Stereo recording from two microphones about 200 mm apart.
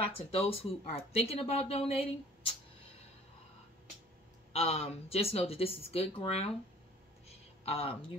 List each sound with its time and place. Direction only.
0.0 s speech: 30° left (ahead or behind)
4.5 s speech: 30° left (ahead or behind)
7.2 s a sound: 30° left (ahead or behind)